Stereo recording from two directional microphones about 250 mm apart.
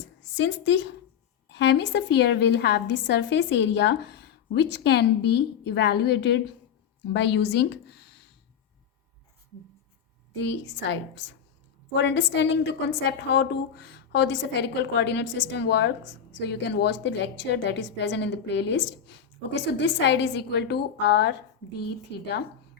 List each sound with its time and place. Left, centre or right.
0.3 s a woman's voice: left
10.3 s a woman's voice: left